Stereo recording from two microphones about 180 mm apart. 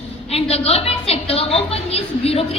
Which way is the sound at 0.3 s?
35° left (ahead or behind).